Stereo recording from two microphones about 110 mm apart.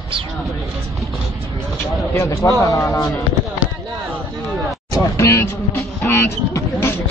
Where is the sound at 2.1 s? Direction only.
25° left (ahead or behind).